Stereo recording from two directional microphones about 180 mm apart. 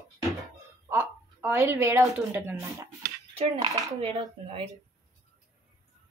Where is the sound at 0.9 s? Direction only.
10° right (ahead or behind).